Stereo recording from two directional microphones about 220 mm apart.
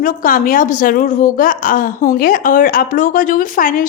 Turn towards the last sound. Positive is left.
turn(degrees=40)  # may be behind; listen again after turning